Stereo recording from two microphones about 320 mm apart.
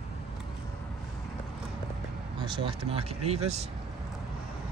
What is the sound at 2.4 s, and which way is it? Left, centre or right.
Speech, centre.